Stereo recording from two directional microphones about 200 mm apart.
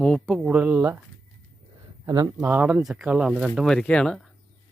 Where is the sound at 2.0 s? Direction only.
20° right (ahead or behind).